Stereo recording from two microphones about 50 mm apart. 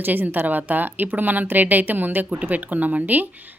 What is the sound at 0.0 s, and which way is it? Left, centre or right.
A woman's voice, right.